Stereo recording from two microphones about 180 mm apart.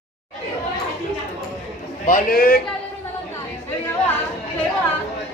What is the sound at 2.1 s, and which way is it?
Speech, 50° left (ahead or behind).